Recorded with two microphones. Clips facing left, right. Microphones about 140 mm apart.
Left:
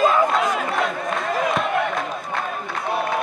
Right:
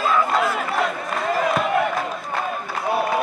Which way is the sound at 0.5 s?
Centre (ahead or behind).